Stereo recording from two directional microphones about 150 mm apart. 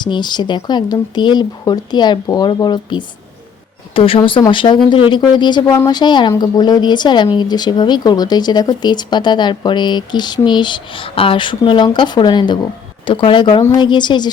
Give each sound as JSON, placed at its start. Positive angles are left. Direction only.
{"t": 0.0, "sound": "speech", "side_deg": 30}